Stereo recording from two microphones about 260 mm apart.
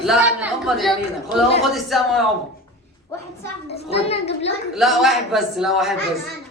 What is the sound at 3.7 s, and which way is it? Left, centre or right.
Speech, left.